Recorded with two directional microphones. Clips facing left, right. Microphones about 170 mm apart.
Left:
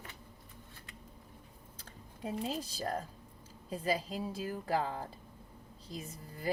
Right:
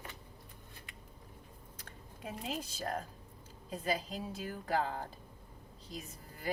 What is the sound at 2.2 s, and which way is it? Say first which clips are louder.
Speech: left 4 dB; 35° left (ahead or behind).